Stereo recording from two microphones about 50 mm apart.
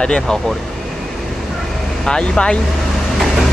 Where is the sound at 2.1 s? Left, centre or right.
Centre.